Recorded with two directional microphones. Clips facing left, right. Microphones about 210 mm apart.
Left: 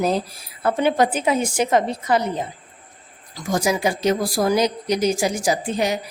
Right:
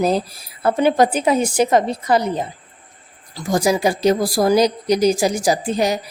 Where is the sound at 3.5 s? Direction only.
35° right (ahead or behind).